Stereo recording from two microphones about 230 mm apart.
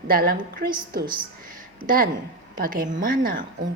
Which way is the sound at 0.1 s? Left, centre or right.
Right.